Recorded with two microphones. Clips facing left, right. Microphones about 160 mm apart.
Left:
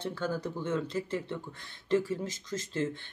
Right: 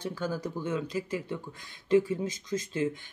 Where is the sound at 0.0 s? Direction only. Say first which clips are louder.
Even; 10° right (ahead or behind).